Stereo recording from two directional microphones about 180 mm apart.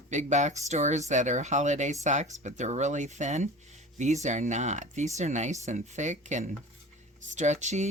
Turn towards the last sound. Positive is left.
turn(degrees=-40)  # may be behind; listen again after turning